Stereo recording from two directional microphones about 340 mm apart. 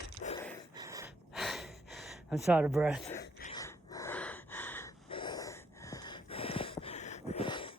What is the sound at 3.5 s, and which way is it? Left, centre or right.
Gasp, centre.